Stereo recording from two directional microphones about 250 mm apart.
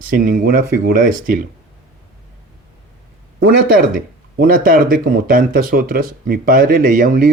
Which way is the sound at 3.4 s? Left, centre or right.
Right.